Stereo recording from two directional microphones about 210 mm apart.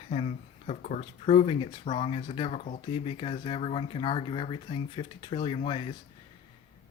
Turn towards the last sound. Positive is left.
turn(degrees=25)  # may be behind; listen again after turning